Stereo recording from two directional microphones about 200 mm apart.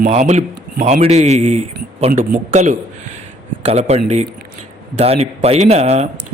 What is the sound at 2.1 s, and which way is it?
Speech, 45° right (ahead or behind).